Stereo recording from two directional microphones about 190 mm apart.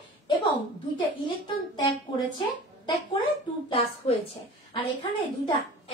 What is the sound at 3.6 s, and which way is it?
Speech, 30° left (ahead or behind).